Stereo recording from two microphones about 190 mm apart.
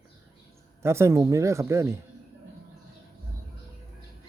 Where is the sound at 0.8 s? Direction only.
15° right (ahead or behind).